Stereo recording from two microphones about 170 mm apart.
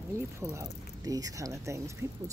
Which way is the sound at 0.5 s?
20° right (ahead or behind).